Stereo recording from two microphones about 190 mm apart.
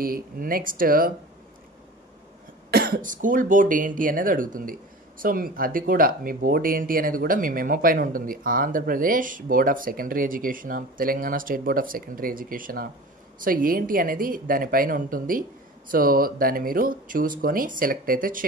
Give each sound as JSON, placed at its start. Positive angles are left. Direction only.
{"t": 0.0, "sound": "speech", "side_deg": -50}
{"t": 2.7, "sound": "speech", "side_deg": -50}